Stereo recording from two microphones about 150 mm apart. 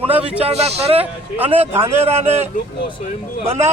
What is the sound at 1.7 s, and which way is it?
Speech, 15° right (ahead or behind).